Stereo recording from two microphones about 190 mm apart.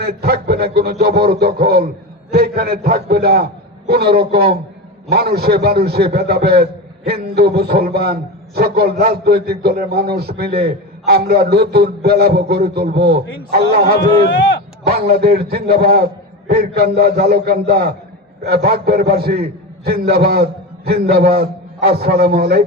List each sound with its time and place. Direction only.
0.0 s a man's voice: 55° right (ahead or behind)